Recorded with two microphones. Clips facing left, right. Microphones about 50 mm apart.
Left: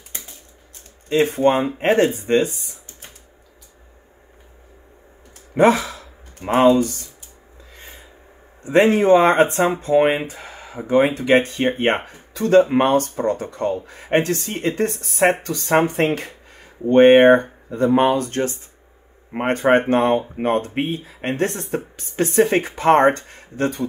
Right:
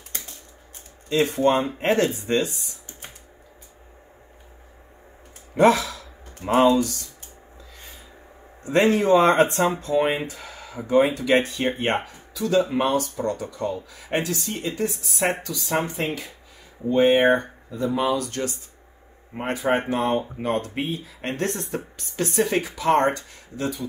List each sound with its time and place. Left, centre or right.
1.2 s speech: left
1.5 s speech: left
5.6 s speech: left
8.6 s a man's voice: left
8.9 s speech: left
15.9 s speech: left
16.8 s speech: left
17.4 s speech: left
17.8 s speech: left
18.1 s speech: left
19.3 s speech: left
20.3 s speech: left